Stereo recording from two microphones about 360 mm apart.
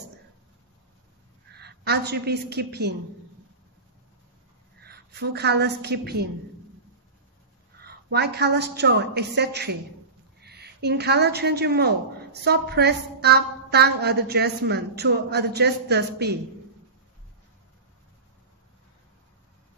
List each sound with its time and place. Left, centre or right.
1.5 s a woman's voice: right
4.8 s a woman's voice: right
7.8 s a woman's voice: right